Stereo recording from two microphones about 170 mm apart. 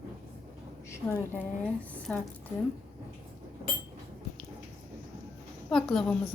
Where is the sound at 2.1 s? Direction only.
5° left (ahead or behind).